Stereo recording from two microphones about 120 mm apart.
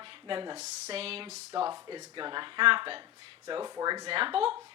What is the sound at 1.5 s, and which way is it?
Speech, 35° right (ahead or behind).